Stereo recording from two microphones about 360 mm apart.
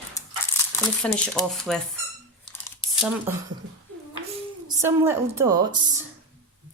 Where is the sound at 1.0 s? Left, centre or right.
Centre.